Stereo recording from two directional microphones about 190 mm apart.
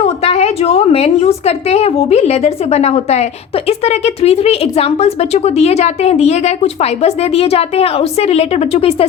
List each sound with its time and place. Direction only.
0.0 s a woman's voice: 30° left (ahead or behind)